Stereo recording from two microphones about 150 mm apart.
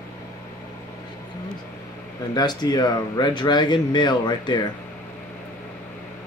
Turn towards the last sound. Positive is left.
turn(degrees=30)  # may be behind; listen again after turning